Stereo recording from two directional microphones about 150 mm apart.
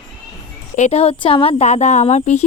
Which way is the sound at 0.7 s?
50° left (ahead or behind).